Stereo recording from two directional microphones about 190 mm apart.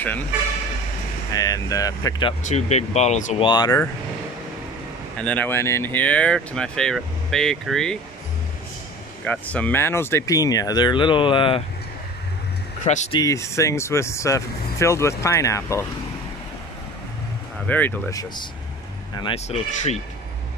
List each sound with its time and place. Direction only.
1.3 s speech: 20° left (ahead or behind)
2.4 s speech: 35° left (ahead or behind)
3.4 s speech: 20° left (ahead or behind)
5.2 s speech: 10° left (ahead or behind)
9.2 s speech: 5° left (ahead or behind); by 11.6 s 25° left (ahead or behind)
12.8 s speech: 35° left (ahead or behind)
13.2 s speech: 15° left (ahead or behind)
17.6 s speech: 10° left (ahead or behind)
19.4 s speech: 35° left (ahead or behind)